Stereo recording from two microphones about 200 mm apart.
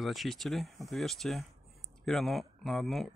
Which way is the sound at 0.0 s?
Centre (ahead or behind).